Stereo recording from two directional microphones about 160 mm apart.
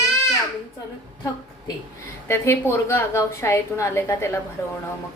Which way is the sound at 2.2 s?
15° left (ahead or behind).